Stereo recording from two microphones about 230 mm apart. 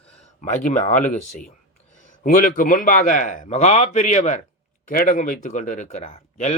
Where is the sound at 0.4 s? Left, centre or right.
Left.